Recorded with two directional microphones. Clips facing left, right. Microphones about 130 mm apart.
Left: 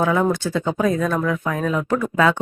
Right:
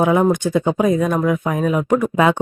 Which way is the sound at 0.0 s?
20° right (ahead or behind).